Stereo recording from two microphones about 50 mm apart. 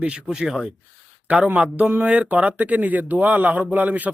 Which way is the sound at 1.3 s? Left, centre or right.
Right.